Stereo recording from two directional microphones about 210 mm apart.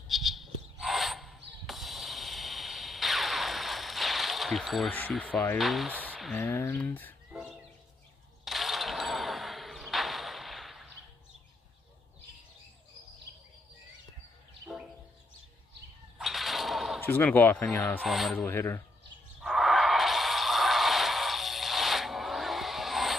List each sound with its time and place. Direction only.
0.1 s a sound: centre (ahead or behind)
6.1 s speech: centre (ahead or behind)
8.5 s vehicle: centre (ahead or behind)
16.2 s whip: centre (ahead or behind)
17.0 s speech: 10° left (ahead or behind)
19.4 s music: centre (ahead or behind)